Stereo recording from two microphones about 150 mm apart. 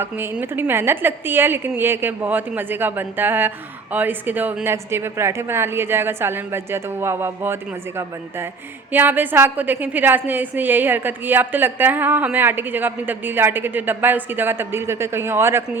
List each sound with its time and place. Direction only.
0.0 s a woman's voice: 15° right (ahead or behind)